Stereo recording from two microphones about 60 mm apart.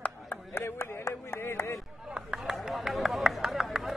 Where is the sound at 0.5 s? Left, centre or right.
Left.